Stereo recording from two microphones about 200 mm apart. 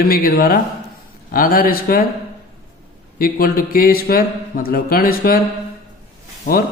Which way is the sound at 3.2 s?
45° left (ahead or behind).